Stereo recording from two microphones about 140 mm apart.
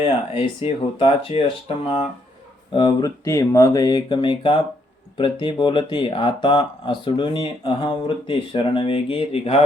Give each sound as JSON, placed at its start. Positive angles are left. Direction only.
{"t": 0.0, "sound": "speech", "side_deg": 40}
{"t": 2.7, "sound": "speech", "side_deg": 30}